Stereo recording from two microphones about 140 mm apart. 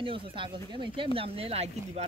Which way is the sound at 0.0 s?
40° right (ahead or behind).